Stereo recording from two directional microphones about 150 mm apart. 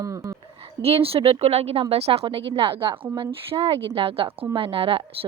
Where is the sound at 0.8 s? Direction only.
40° right (ahead or behind).